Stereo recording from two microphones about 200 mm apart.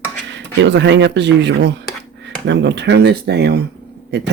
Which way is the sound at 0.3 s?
65° right (ahead or behind).